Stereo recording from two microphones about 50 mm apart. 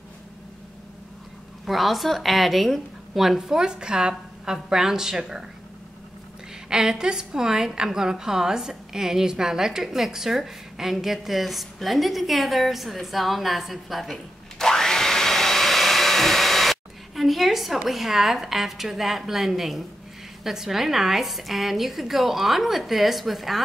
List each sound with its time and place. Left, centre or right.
1.7 s a woman's voice: centre
6.7 s a woman's voice: centre